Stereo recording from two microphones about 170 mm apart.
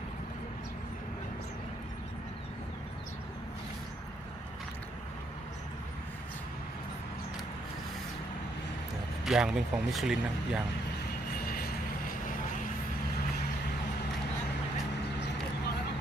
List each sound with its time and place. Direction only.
9.2 s speech: centre (ahead or behind)
11.3 s vehicle: 60° left (ahead or behind)